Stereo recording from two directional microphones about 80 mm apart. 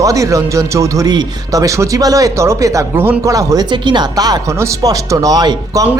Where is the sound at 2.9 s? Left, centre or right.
Right.